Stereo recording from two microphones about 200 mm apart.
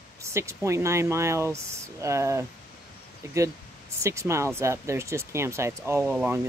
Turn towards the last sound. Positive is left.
turn(degrees=-5)  # may be behind; listen again after turning